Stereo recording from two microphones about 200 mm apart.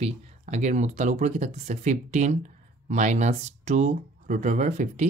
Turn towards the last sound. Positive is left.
turn(degrees=-35)  # may be behind; listen again after turning